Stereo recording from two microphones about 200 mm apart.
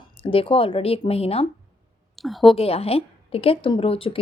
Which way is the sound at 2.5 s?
30° left (ahead or behind).